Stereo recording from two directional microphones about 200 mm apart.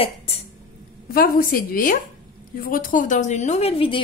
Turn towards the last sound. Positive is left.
turn(degrees=30)  # may be behind; listen again after turning